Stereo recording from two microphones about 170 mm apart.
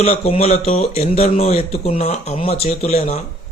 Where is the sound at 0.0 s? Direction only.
40° left (ahead or behind).